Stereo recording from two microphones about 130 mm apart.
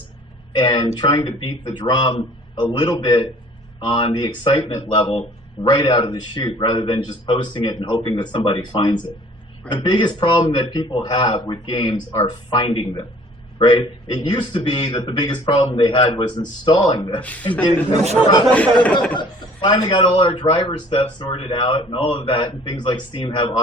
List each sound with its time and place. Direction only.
0.5 s a man's voice: 35° left (ahead or behind)
18.5 s speech: 10° left (ahead or behind)
19.1 s a man's voice: 35° left (ahead or behind)